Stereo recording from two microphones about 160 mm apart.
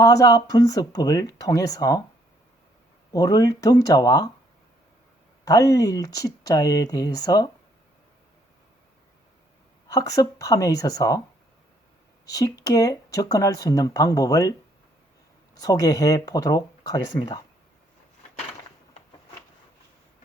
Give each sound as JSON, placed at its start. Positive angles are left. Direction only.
{"t": 0.0, "sound": "speech", "side_deg": 20}
{"t": 3.1, "sound": "speech", "side_deg": 25}
{"t": 5.5, "sound": "speech", "side_deg": 20}
{"t": 9.9, "sound": "speech", "side_deg": 25}
{"t": 12.3, "sound": "speech", "side_deg": 25}
{"t": 15.6, "sound": "speech", "side_deg": 25}